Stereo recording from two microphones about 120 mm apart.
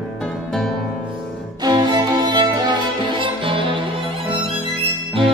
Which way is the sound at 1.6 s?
35° right (ahead or behind).